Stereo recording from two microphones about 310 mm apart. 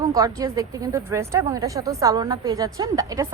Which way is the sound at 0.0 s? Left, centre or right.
Centre.